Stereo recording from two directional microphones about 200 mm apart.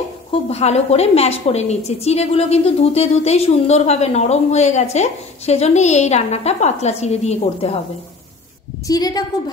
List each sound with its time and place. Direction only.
0.3 s a woman's voice: 30° left (ahead or behind)
8.8 s a woman's voice: 20° left (ahead or behind)